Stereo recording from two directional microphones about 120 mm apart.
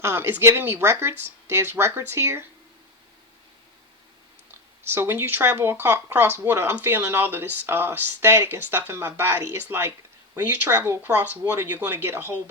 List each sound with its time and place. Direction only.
0.0 s speech: 20° right (ahead or behind)
4.9 s speech: 20° right (ahead or behind)